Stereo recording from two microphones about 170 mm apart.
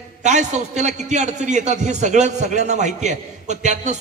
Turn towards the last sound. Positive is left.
turn(degrees=-45)  # may be behind; listen again after turning